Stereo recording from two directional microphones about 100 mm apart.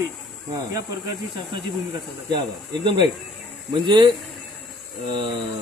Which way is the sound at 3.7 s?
55° right (ahead or behind).